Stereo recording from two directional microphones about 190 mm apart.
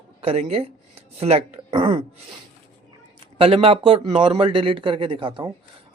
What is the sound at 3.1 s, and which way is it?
A man's voice, 30° right (ahead or behind).